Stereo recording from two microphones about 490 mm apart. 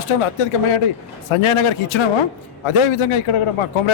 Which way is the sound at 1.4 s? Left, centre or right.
Left.